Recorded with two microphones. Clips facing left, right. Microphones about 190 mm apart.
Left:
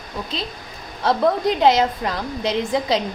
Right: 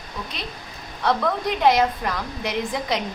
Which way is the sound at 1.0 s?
30° left (ahead or behind).